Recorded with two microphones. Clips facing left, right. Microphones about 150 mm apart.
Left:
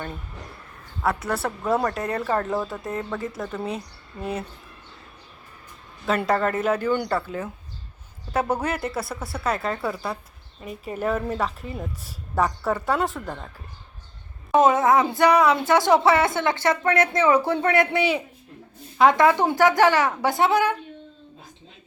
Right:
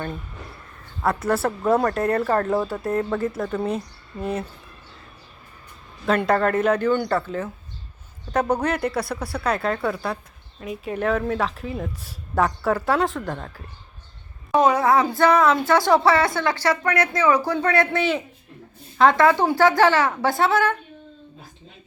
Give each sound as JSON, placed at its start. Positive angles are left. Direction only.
{"t": 1.0, "sound": "a woman's voice", "side_deg": 0}
{"t": 6.1, "sound": "a woman's voice", "side_deg": 5}
{"t": 14.5, "sound": "a woman's voice", "side_deg": 20}